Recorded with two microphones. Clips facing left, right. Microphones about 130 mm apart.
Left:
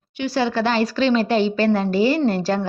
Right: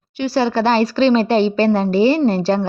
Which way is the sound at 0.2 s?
35° right (ahead or behind).